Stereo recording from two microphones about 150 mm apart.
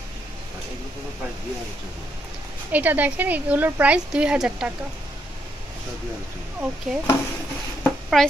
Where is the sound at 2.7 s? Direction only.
10° right (ahead or behind).